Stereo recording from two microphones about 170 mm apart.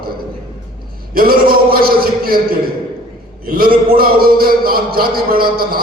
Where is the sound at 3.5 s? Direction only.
60° right (ahead or behind).